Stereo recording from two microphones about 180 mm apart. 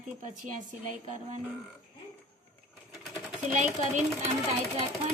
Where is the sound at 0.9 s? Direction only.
40° right (ahead or behind).